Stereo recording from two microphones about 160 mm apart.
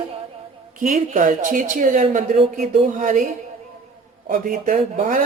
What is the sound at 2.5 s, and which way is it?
A woman's voice, 55° right (ahead or behind).